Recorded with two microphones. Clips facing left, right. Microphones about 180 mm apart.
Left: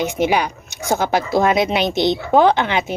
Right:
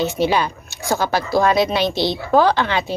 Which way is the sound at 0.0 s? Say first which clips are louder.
Even; 15° left (ahead or behind).